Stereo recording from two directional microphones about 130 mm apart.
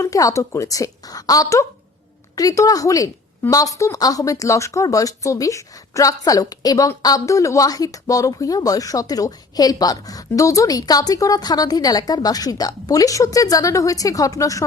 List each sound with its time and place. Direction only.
0.0 s speech: 25° left (ahead or behind)